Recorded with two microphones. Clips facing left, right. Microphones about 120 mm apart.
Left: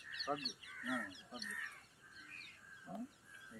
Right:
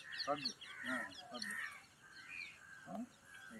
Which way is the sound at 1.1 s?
10° right (ahead or behind).